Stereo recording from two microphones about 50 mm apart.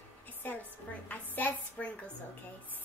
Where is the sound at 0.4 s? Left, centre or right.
Left.